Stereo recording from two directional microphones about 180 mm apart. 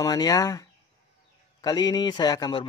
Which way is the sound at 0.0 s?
20° left (ahead or behind).